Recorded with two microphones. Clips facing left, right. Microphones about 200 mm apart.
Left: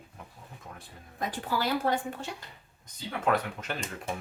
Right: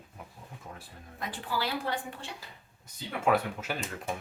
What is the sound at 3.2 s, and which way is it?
Speech, 5° right (ahead or behind).